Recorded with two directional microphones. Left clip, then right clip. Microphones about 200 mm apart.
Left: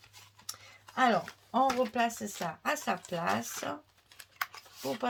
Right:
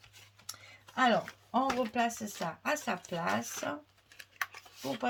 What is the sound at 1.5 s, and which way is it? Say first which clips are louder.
Speech: left 4 dB; 30° left (ahead or behind).